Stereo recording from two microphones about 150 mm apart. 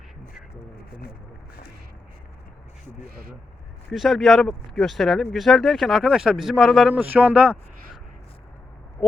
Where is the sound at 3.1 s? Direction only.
85° right.